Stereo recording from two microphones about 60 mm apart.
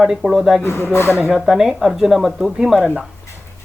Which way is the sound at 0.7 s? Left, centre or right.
Left.